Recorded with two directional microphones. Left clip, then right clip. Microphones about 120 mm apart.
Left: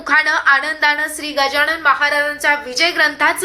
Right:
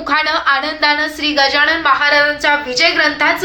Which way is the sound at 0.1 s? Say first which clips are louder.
Left 1 dB; 10° left (ahead or behind).